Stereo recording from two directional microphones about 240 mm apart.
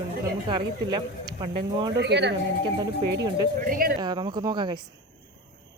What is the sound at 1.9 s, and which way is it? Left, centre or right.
Speech, right.